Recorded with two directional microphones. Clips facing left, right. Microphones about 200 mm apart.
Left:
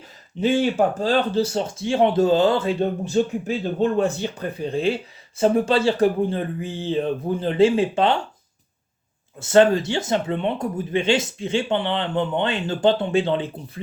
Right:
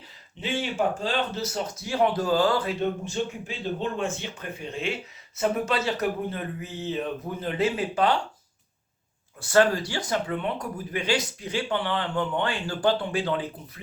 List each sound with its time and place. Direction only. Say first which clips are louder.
0.3 s speech: left 9 dB; 40° left (ahead or behind); by 8.2 s 25° left (ahead or behind)
9.4 s speech: left 5 dB; 25° left (ahead or behind)